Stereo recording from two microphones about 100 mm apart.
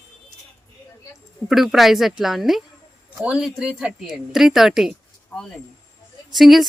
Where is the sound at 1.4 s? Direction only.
Centre (ahead or behind).